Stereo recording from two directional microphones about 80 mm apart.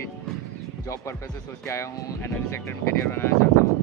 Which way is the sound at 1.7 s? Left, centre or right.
Left.